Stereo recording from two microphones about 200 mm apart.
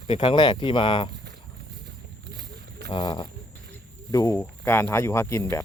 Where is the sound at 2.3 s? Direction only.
55° right (ahead or behind).